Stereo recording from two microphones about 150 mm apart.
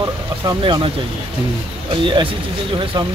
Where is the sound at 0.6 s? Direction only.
35° right (ahead or behind).